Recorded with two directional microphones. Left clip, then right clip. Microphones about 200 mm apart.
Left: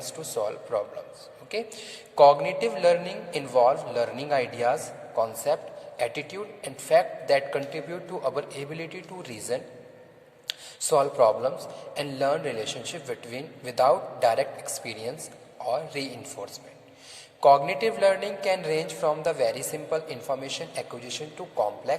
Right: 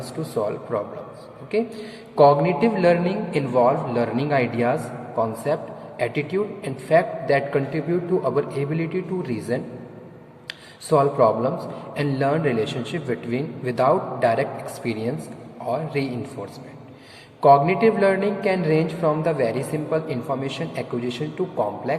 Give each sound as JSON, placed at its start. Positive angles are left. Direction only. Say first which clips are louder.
{"t": 0.2, "sound": "speech", "louder": "right 5 dB", "side_deg": 20}
{"t": 2.1, "sound": "speech", "louder": "right 2 dB", "side_deg": 20}
{"t": 17.4, "sound": "speech", "louder": "right 4 dB", "side_deg": 25}